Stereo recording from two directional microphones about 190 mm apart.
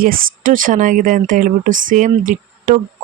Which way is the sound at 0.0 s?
50° right (ahead or behind).